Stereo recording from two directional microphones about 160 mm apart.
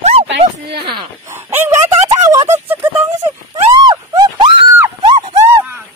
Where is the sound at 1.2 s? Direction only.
15° right (ahead or behind).